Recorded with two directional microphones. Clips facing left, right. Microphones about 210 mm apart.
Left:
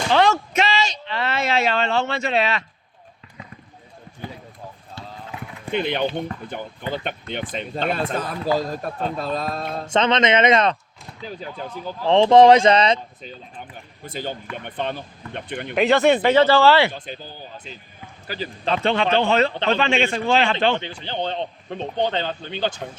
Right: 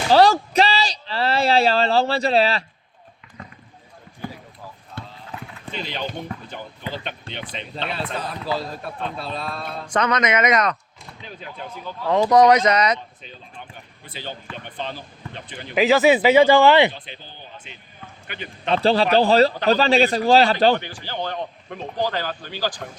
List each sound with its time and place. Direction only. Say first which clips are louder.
0.1 s speech: right 4 dB; 35° right (ahead or behind)
5.0 s run: right 2 dB; 55° right (ahead or behind)
5.7 s speech: left 7 dB; 60° left (ahead or behind); by 9.8 s 40° left (ahead or behind)
9.8 s speech: left 2 dB; 25° left (ahead or behind)
12.0 s speech: left 3 dB; 25° left (ahead or behind)
14.0 s speech: left 5 dB; 45° left (ahead or behind)
14.5 s speech: left 4 dB; 60° left (ahead or behind)
15.7 s speech: right 1 dB; centre (ahead or behind); by 16.9 s 20° right (ahead or behind)
17.1 s speech: left 5 dB; 40° left (ahead or behind)
18.7 s speech: right 3 dB; 35° right (ahead or behind)
20.8 s speech: left 2 dB; 20° left (ahead or behind)